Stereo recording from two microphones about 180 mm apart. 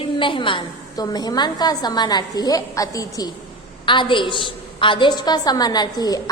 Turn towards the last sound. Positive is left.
turn(degrees=20)  # may be behind; listen again after turning